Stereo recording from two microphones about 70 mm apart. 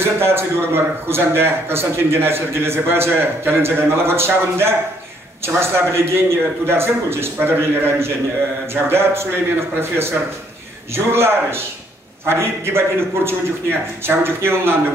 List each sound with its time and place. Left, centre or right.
0.0 s a man's voice: right